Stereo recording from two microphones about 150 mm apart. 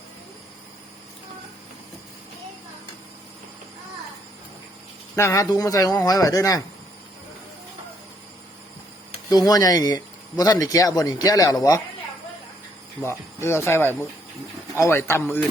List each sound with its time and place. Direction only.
5.1 s a man's voice: 20° left (ahead or behind)
9.5 s a man's voice: 25° left (ahead or behind)
13.0 s speech: 20° left (ahead or behind)